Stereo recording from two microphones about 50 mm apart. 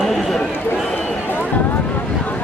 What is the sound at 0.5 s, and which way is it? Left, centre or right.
Run, left.